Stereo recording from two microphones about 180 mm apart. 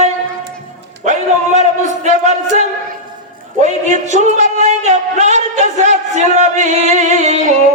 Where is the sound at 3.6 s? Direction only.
40° right (ahead or behind).